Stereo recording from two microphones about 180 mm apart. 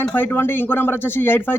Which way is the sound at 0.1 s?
10° left (ahead or behind).